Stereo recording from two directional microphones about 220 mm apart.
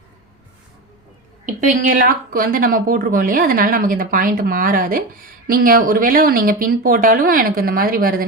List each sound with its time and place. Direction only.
1.5 s speech: 40° right (ahead or behind)